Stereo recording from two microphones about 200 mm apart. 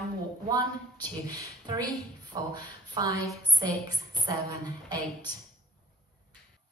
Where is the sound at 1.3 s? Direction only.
20° right (ahead or behind).